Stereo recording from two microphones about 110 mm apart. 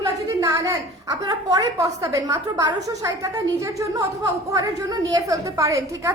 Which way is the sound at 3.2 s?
30° right (ahead or behind).